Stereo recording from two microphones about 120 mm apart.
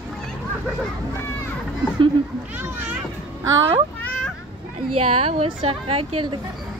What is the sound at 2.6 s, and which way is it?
Speech, 15° right (ahead or behind).